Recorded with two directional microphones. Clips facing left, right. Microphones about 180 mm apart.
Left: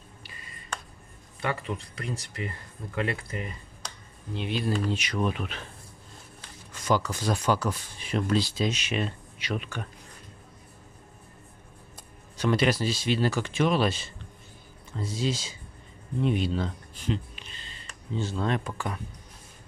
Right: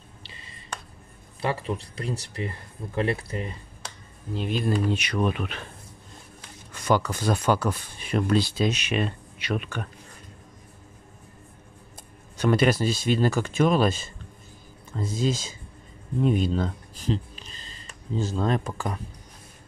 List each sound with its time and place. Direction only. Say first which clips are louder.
0.2 s a sound: right 1 dB; 25° right (ahead or behind)
1.4 s speech: right 3 dB; 30° right (ahead or behind)
4.3 s speech: right 3 dB; 45° right (ahead or behind); by 5.6 s 60° right (ahead or behind)
6.7 s speech: right 3 dB; 60° right (ahead or behind)
12.4 s speech: right 3 dB; 50° right (ahead or behind)